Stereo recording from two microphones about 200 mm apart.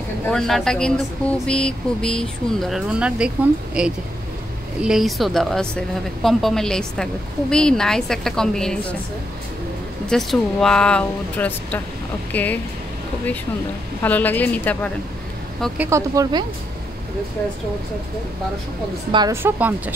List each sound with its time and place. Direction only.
0.3 s a woman's voice: centre (ahead or behind)
10.0 s a woman's voice: centre (ahead or behind)
14.0 s a woman's voice: 10° left (ahead or behind)
15.9 s speech: 20° right (ahead or behind)
19.1 s speech: 15° right (ahead or behind)